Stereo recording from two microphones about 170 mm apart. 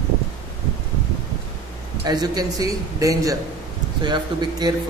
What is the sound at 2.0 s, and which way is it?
A man's voice, 25° right (ahead or behind).